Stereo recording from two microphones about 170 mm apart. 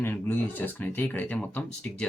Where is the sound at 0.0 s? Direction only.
10° left (ahead or behind).